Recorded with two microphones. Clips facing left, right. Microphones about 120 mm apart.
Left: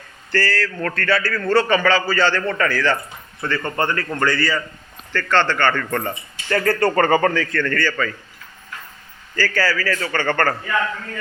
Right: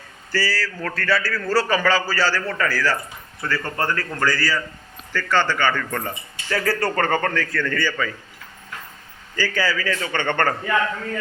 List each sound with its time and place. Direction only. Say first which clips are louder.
0.3 s speech: left 3 dB; 10° right (ahead or behind)
9.3 s a man's voice: left 2 dB; 15° right (ahead or behind)